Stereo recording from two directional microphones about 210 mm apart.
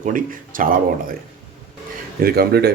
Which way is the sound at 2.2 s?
50° right (ahead or behind).